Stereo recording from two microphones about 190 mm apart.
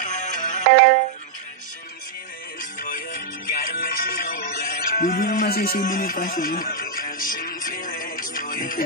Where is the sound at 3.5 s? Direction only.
50° left (ahead or behind).